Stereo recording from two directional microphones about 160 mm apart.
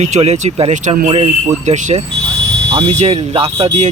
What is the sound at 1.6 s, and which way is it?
Speech, 50° right (ahead or behind).